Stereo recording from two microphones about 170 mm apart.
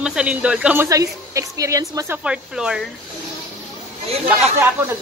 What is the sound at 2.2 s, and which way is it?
Speech, 5° right (ahead or behind).